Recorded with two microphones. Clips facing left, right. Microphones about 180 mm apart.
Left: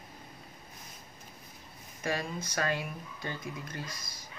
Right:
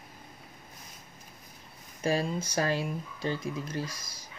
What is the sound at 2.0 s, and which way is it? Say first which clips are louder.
Speech: right 5 dB; 30° right (ahead or behind).